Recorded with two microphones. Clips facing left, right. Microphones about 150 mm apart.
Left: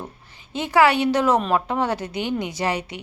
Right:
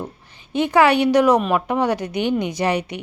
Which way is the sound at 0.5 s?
20° right (ahead or behind).